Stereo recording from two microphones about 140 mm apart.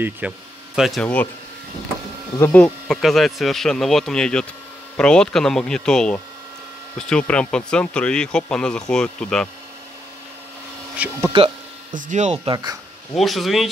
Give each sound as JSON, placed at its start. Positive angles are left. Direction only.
{"t": 0.2, "sound": "speech", "side_deg": -10}
{"t": 1.0, "sound": "speech", "side_deg": 10}
{"t": 2.5, "sound": "speech", "side_deg": 10}
{"t": 11.0, "sound": "speech", "side_deg": -15}
{"t": 11.9, "sound": "speech", "side_deg": -60}
{"t": 12.4, "sound": "speech", "side_deg": -25}
{"t": 13.1, "sound": "speech", "side_deg": 0}